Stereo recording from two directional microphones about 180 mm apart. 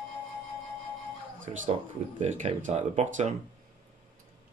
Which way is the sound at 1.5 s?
35° right (ahead or behind).